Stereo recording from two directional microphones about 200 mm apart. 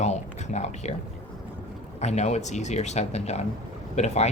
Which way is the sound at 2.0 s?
35° left (ahead or behind).